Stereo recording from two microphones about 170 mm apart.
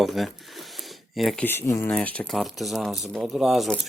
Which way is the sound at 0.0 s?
Centre (ahead or behind).